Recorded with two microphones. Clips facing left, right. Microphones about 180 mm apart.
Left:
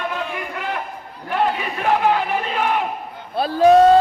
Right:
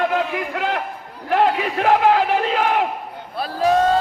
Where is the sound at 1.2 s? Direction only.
90° right.